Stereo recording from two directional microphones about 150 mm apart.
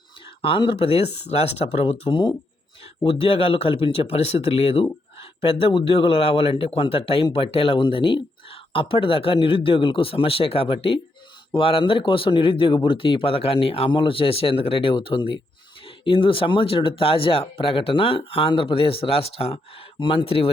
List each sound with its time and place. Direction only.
0.4 s speech: 35° left (ahead or behind)